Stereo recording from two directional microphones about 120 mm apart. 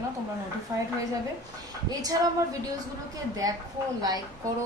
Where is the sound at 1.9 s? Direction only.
30° right (ahead or behind).